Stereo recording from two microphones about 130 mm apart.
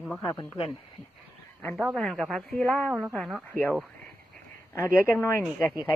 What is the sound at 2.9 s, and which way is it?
Speech, 5° right (ahead or behind).